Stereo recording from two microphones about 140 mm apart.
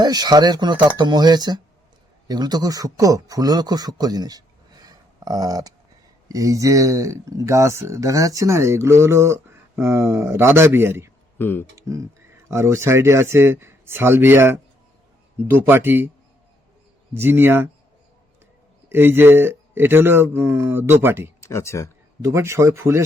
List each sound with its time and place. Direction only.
0.0 s speech: 30° right (ahead or behind)
11.3 s speech: 15° left (ahead or behind)
11.8 s speech: 20° right (ahead or behind)
17.2 s speech: 15° right (ahead or behind)
18.9 s speech: 15° right (ahead or behind)
21.4 s speech: 20° left (ahead or behind)
22.2 s speech: 20° right (ahead or behind)